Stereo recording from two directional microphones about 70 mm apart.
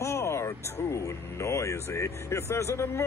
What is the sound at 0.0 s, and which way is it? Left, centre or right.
Speech, left.